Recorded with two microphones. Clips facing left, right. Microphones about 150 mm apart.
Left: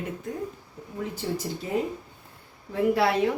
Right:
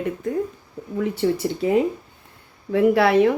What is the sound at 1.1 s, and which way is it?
Speech, 70° right (ahead or behind).